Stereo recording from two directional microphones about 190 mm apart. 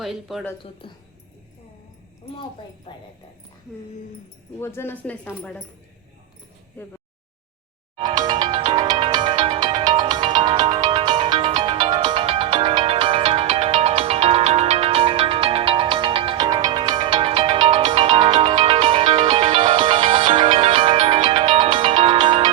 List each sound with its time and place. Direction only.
0.0 s speech: centre (ahead or behind)
4.6 s speech: 10° left (ahead or behind)
7.9 s ringtone: 20° right (ahead or behind)